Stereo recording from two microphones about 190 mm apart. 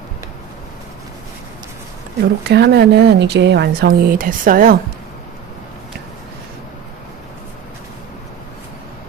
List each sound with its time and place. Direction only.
2.4 s speech: 60° right (ahead or behind)